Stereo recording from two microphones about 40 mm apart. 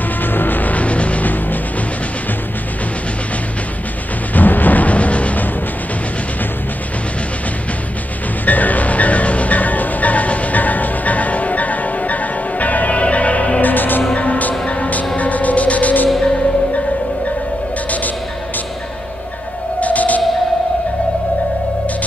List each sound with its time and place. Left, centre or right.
0.2 s music: left
4.3 s music: left
8.5 s music: left
14.1 s music: left
19.8 s music: left